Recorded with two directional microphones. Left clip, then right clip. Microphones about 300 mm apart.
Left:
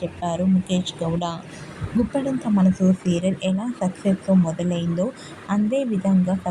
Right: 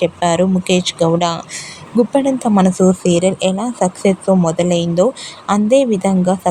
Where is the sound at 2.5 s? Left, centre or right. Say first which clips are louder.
Right 9 dB; right.